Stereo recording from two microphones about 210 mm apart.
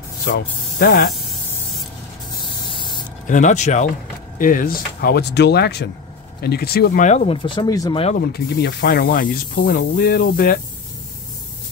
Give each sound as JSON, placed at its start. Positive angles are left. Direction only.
{"t": 0.3, "sound": "speech", "side_deg": 45}
{"t": 2.4, "sound": "spray", "side_deg": 20}
{"t": 3.3, "sound": "speech", "side_deg": 35}
{"t": 7.1, "sound": "speech", "side_deg": 30}
{"t": 8.2, "sound": "speech", "side_deg": 50}